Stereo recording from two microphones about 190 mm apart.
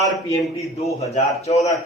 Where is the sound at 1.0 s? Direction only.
35° left (ahead or behind).